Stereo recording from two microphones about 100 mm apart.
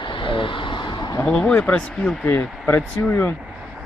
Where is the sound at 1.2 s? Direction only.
10° left (ahead or behind).